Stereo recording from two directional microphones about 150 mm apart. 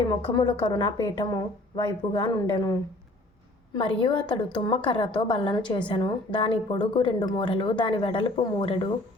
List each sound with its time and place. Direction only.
0.3 s speech: 30° left (ahead or behind)
3.8 s speech: 30° left (ahead or behind)